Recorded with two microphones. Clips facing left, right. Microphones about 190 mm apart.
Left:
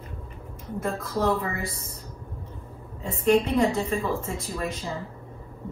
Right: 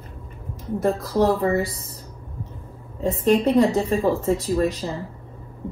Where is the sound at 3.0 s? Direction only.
35° right (ahead or behind).